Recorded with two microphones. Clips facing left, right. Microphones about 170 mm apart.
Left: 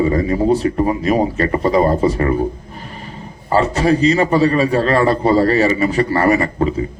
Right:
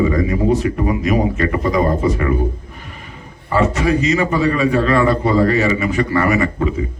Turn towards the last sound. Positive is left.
turn(degrees=35)  # may be behind; listen again after turning